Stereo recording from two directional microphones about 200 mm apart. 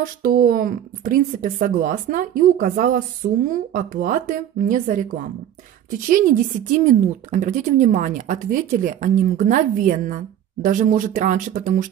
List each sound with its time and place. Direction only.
0.0 s a woman's voice: 45° right (ahead or behind)